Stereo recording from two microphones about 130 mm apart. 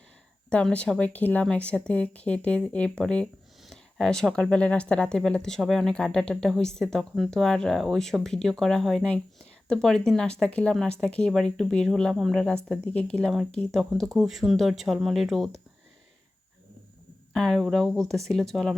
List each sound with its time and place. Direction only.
0.5 s speech: 10° left (ahead or behind)
17.3 s speech: centre (ahead or behind)